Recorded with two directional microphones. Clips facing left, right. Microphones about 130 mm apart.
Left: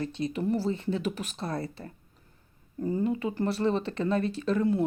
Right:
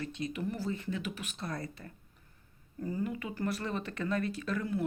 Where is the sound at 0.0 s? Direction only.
35° left (ahead or behind).